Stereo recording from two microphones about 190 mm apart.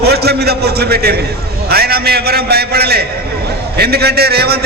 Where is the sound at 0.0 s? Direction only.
55° right (ahead or behind).